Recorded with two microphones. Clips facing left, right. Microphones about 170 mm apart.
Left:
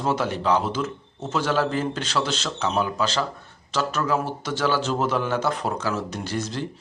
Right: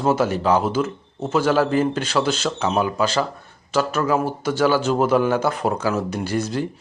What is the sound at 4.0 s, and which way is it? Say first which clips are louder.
Speech: right 3 dB; 50° right (ahead or behind).